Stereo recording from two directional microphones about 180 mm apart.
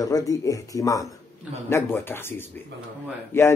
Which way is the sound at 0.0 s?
20° left (ahead or behind).